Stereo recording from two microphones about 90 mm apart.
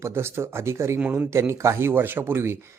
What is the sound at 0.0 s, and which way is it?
Speech, 30° right (ahead or behind).